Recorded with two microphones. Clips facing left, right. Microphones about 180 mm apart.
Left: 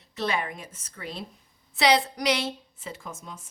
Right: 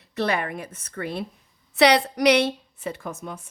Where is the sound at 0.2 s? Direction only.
60° right (ahead or behind).